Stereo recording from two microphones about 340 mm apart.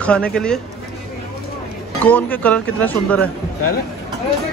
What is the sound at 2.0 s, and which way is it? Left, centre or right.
Speech, centre.